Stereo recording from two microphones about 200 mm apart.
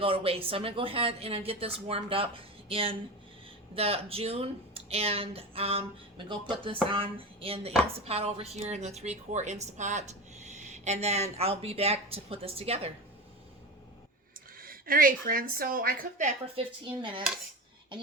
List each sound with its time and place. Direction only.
0.0 s speech: 30° right (ahead or behind)
14.6 s a woman's voice: 45° right (ahead or behind); by 17.2 s 25° right (ahead or behind)